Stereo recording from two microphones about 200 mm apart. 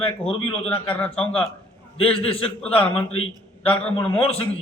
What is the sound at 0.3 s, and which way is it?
Speech, 25° left (ahead or behind).